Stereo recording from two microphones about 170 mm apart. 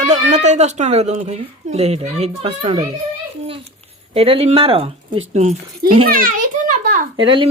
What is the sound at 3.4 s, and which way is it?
Babbling, 35° right (ahead or behind).